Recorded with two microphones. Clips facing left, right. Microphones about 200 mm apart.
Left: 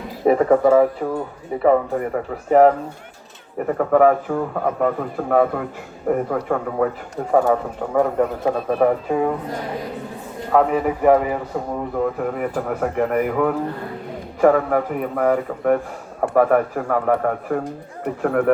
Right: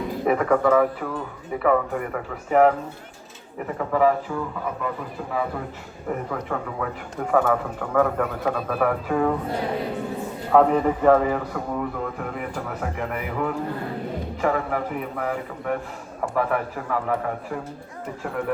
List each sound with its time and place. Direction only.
0.3 s speech: 30° left (ahead or behind)
3.7 s a man's voice: 50° left (ahead or behind)
6.1 s a man's voice: 45° left (ahead or behind)
7.3 s a man's voice: 20° left (ahead or behind)
10.5 s a man's voice: 5° left (ahead or behind)
11.9 s a man's voice: 45° left (ahead or behind)